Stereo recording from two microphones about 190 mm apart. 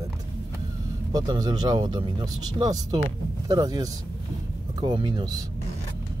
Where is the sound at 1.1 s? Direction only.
20° right (ahead or behind).